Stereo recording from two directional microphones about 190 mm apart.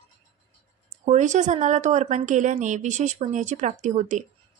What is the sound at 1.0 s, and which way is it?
A woman's voice, 40° right (ahead or behind).